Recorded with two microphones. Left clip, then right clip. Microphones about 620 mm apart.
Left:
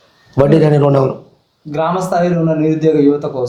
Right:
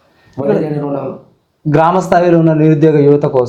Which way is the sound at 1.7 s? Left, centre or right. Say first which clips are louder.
Right 5 dB; right.